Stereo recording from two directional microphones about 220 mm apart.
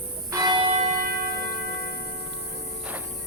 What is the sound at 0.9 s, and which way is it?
Church bell, 45° right (ahead or behind).